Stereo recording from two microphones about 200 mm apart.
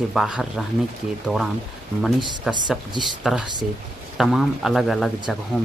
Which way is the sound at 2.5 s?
Centre (ahead or behind).